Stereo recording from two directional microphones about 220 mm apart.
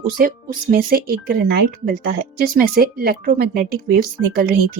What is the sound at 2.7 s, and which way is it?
Speech, 45° right (ahead or behind).